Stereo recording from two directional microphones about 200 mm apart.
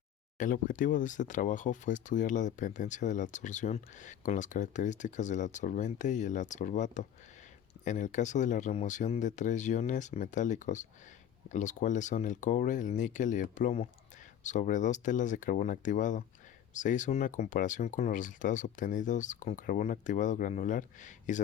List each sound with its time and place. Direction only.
0.3 s speech: 40° left (ahead or behind)